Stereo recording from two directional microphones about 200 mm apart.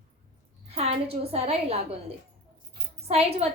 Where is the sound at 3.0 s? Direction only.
30° right (ahead or behind).